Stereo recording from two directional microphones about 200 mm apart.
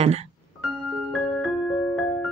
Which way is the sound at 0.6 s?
Centre (ahead or behind).